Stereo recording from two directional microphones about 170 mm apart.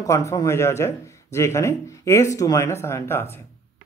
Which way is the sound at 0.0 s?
20° left (ahead or behind).